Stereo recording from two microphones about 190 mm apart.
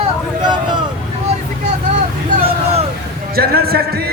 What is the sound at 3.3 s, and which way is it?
Music, 55° right (ahead or behind).